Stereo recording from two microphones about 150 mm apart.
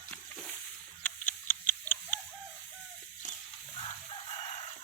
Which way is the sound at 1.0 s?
15° left (ahead or behind).